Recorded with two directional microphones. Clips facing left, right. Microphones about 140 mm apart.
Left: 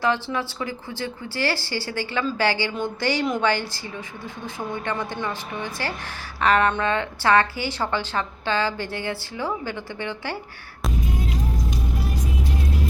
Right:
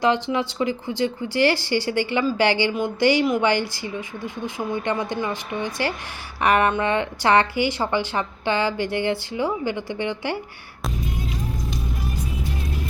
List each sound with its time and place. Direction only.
0.0 s a woman's voice: 15° right (ahead or behind)